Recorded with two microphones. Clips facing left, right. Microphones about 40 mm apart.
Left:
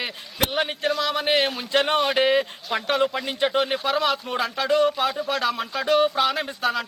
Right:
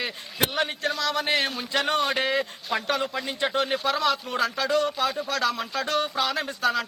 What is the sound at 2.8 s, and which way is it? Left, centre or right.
Speech, left.